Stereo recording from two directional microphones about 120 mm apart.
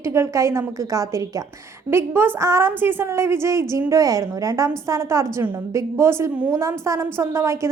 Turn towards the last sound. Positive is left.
turn(degrees=-25)  # may be behind; listen again after turning